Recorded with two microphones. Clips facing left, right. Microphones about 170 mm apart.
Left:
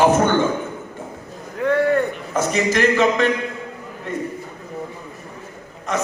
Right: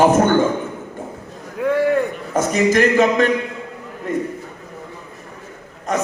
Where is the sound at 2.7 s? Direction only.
45° right (ahead or behind).